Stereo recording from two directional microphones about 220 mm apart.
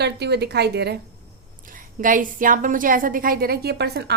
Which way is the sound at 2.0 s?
40° right (ahead or behind).